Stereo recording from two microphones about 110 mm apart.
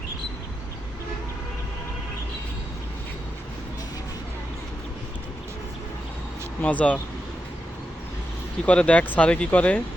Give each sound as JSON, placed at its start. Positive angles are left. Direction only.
{"t": 6.6, "sound": "speech", "side_deg": 15}
{"t": 8.6, "sound": "speech", "side_deg": 10}